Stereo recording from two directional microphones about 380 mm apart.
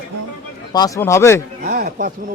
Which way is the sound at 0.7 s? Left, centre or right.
Centre.